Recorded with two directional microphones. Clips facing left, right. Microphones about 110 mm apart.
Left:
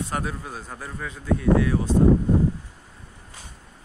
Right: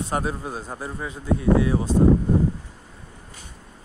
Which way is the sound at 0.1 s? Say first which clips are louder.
Right 3 dB; 25° right (ahead or behind).